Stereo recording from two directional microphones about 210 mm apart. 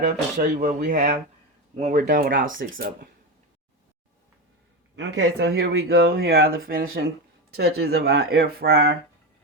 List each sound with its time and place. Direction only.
0.0 s speech: 35° right (ahead or behind)
4.9 s speech: 55° right (ahead or behind)